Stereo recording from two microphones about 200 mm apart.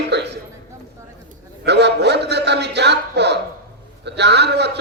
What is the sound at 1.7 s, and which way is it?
A man's voice, 60° right (ahead or behind).